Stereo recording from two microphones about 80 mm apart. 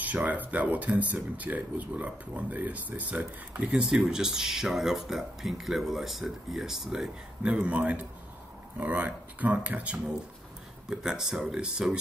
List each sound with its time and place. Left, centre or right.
0.0 s speech: centre
10.9 s speech: centre